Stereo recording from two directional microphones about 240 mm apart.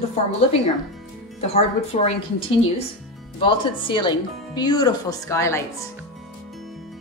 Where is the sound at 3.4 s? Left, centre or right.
Left.